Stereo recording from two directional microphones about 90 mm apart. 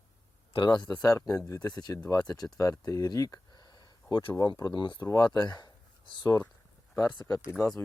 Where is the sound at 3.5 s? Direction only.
55° left (ahead or behind).